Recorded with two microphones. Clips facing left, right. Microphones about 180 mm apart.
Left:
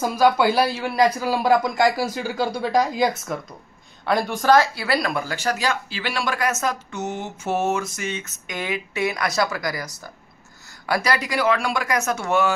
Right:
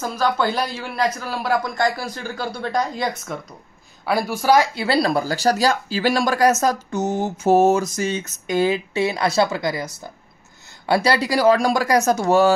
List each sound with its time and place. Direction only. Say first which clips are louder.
0.0 s speech: left 3 dB; 10° left (ahead or behind)
2.7 s a woman's voice: left 3 dB; 5° left (ahead or behind)
4.0 s speech: even; 5° right (ahead or behind)
4.7 s speech: right 4 dB; 30° right (ahead or behind)